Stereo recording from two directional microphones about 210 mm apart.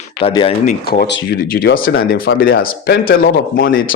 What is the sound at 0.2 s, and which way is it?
Speech, 25° left (ahead or behind).